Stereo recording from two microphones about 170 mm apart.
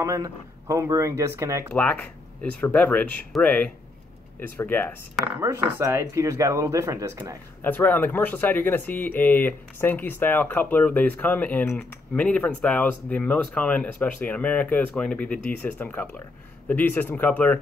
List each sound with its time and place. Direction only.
0.0 s speech: 20° right (ahead or behind)
1.7 s speech: 10° left (ahead or behind)
5.4 s speech: 15° right (ahead or behind)
7.6 s speech: 10° left (ahead or behind)